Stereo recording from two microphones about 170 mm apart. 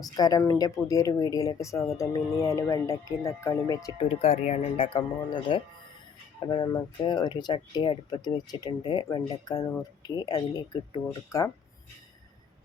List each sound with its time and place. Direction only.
0.0 s speech: 20° left (ahead or behind)
4.1 s speech: 40° left (ahead or behind); by 11.5 s 20° left (ahead or behind)